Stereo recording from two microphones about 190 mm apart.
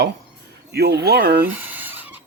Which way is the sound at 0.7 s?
60° right (ahead or behind).